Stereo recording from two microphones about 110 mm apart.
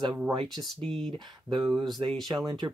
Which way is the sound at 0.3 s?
50° right (ahead or behind).